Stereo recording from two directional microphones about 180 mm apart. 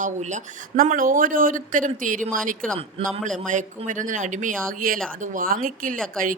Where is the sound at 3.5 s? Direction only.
45° right (ahead or behind).